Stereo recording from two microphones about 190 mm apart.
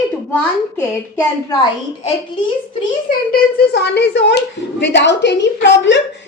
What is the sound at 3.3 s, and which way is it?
A woman's voice, 55° left (ahead or behind).